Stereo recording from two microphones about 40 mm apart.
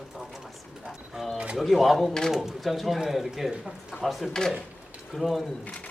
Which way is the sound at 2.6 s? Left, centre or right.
Centre.